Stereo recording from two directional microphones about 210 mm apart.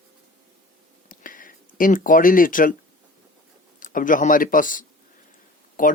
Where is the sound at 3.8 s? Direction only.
40° left (ahead or behind).